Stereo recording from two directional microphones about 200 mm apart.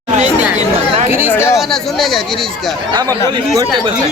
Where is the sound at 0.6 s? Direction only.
35° right (ahead or behind).